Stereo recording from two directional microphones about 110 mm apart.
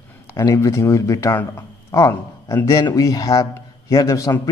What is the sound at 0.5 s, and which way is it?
A man's voice, 25° left (ahead or behind).